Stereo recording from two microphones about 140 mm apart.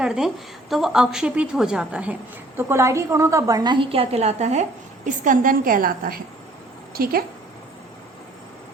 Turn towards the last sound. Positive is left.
turn(degrees=-90)